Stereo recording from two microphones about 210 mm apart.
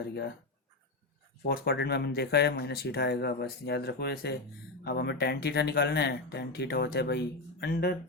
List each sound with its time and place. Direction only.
0.1 s speech: 50° left (ahead or behind)
1.5 s speech: 50° left (ahead or behind)